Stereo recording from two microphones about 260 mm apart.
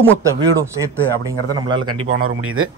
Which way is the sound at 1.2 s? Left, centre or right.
Centre.